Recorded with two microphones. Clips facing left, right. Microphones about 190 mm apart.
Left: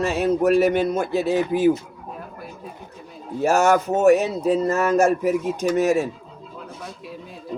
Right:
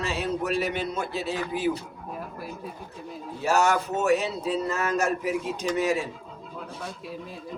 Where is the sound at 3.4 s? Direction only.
50° left (ahead or behind).